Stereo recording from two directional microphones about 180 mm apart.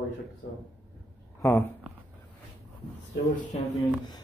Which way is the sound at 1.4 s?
10° left (ahead or behind).